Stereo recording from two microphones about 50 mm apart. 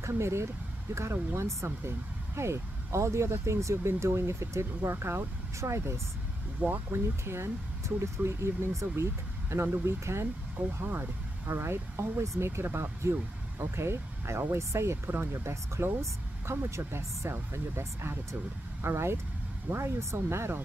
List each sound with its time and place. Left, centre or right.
0.1 s speech: right
10.8 s speech: right
11.4 s speech: right